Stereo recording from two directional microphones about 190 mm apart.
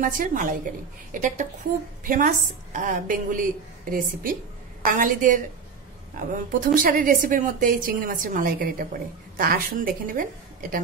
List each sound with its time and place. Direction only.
0.0 s a woman's voice: 45° right (ahead or behind)